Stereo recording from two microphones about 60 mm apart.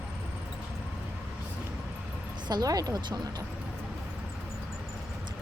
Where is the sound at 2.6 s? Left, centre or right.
Right.